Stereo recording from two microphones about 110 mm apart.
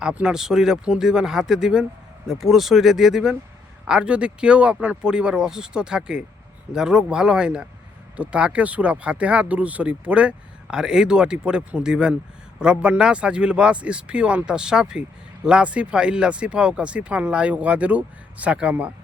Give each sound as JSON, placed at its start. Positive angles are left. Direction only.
{"t": 0.0, "sound": "speech", "side_deg": -10}